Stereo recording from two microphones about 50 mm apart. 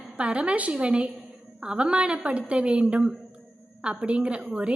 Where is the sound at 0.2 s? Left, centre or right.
Right.